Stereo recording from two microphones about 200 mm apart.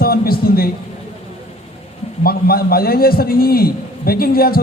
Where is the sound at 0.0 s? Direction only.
50° left (ahead or behind).